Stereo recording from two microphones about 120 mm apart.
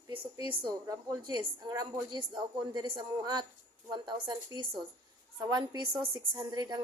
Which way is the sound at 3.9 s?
40° right (ahead or behind).